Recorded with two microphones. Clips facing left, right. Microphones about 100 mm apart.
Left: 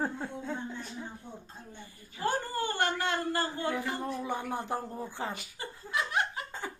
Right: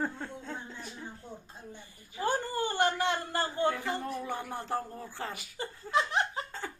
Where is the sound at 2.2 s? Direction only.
20° right (ahead or behind).